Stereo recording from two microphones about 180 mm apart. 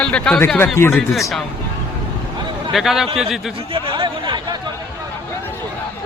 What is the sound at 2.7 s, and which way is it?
Speech, centre (ahead or behind).